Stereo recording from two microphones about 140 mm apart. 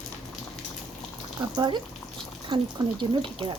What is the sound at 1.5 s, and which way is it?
Speech, 30° right (ahead or behind).